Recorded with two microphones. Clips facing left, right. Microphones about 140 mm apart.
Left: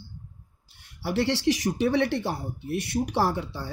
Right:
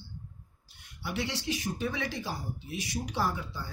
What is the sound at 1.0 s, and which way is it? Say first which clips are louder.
Speech: left 9 dB; 65° left (ahead or behind).